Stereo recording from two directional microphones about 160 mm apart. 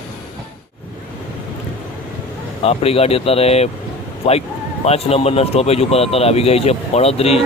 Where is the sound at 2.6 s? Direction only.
40° left (ahead or behind).